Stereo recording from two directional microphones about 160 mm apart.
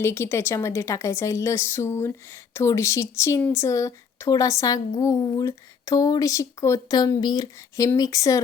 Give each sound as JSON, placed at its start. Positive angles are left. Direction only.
{"t": 0.0, "sound": "speech", "side_deg": 15}